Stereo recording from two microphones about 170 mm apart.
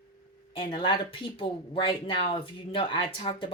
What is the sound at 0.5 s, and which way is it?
Speech, 30° left (ahead or behind).